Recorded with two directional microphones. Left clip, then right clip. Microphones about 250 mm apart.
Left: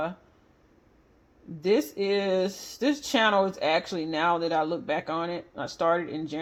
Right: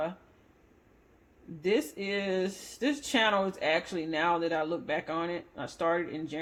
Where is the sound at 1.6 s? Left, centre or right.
Centre.